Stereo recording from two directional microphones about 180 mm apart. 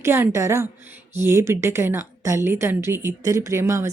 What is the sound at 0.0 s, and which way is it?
A woman's voice, 15° right (ahead or behind).